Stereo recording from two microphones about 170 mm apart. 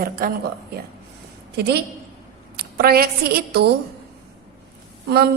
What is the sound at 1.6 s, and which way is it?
Speech, 75° right (ahead or behind).